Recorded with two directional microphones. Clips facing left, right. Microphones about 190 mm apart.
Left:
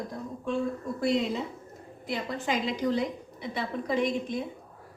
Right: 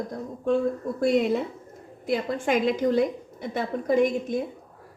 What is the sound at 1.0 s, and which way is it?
A woman's voice, 55° right (ahead or behind).